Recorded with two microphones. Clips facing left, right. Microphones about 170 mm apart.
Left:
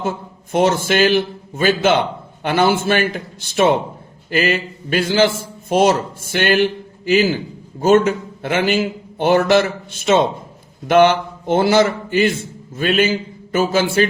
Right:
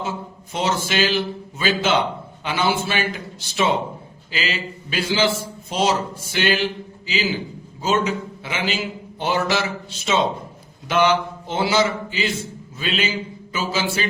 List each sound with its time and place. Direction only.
0.5 s a man's voice: 55° left (ahead or behind)